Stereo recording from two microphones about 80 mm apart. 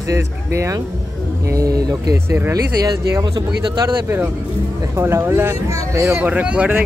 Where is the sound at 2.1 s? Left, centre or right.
Right.